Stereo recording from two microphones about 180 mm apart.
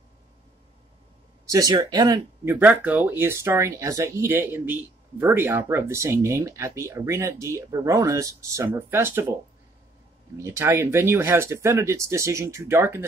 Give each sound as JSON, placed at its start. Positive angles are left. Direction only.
{"t": 1.4, "sound": "speech", "side_deg": -20}
{"t": 10.3, "sound": "speech", "side_deg": -15}